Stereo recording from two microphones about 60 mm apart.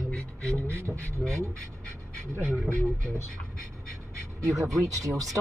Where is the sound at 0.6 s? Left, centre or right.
Right.